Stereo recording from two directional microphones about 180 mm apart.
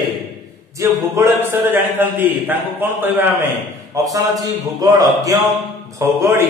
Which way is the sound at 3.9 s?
20° right (ahead or behind).